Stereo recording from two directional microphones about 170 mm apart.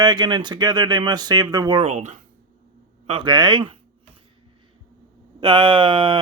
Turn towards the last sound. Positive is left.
turn(degrees=-30)  # may be behind; listen again after turning